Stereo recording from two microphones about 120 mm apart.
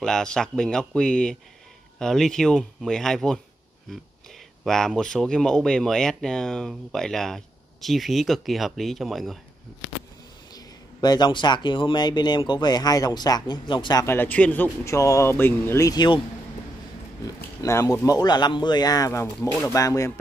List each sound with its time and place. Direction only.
0.0 s a man's voice: 5° left (ahead or behind)
4.6 s speech: 5° left (ahead or behind)
10.5 s speech: 35° left (ahead or behind)
14.0 s a man's voice: 15° left (ahead or behind)
15.0 s speech: 25° left (ahead or behind)
17.2 s speech: 25° left (ahead or behind)